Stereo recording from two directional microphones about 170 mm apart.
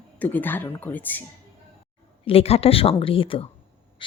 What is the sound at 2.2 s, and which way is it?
Speech, 35° left (ahead or behind).